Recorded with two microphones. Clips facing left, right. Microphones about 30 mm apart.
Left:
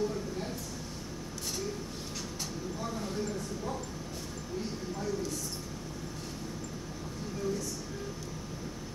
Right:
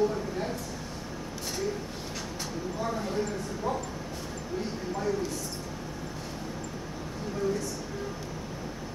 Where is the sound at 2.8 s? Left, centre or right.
Centre.